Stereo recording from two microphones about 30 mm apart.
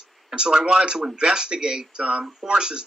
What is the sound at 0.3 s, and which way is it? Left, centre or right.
A man's voice, right.